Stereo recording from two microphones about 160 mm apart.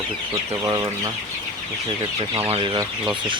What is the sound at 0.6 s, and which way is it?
Speech, 20° right (ahead or behind).